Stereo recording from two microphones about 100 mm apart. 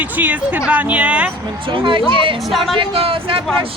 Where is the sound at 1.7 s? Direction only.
60° right (ahead or behind).